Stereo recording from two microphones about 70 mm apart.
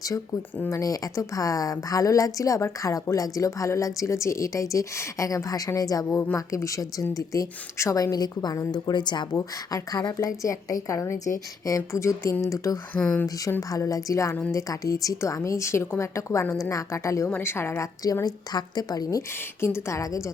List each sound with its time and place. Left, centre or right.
0.7 s a woman's voice: left
6.3 s a woman's voice: left
8.7 s speech: left
10.2 s a woman's voice: left
17.2 s a woman's voice: left
18.0 s a woman's voice: left
19.6 s a woman's voice: left